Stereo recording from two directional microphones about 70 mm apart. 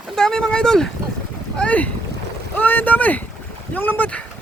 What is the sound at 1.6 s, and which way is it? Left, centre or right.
Speech, left.